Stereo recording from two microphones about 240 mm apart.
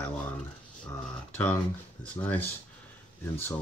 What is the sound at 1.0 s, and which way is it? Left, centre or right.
Speech, centre.